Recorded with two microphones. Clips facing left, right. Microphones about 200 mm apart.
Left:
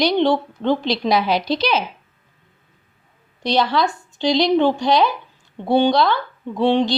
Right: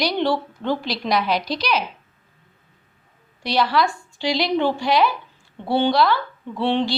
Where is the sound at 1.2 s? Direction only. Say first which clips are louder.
Left 3 dB; centre (ahead or behind).